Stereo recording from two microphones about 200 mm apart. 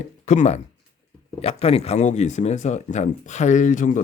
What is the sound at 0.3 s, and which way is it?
Speech, 35° left (ahead or behind).